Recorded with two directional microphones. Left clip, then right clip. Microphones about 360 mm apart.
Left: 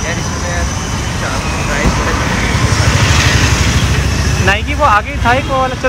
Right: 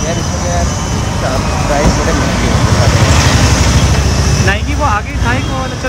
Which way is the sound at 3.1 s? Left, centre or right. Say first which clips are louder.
Even; right.